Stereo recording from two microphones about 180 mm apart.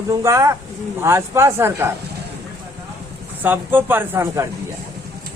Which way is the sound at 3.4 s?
10° right (ahead or behind).